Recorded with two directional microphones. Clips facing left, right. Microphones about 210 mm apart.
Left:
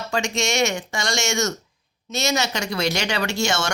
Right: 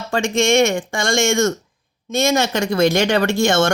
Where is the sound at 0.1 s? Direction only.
55° right (ahead or behind).